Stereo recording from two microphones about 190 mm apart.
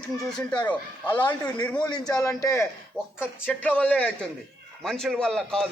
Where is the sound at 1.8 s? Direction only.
20° left (ahead or behind); by 5.7 s 5° left (ahead or behind).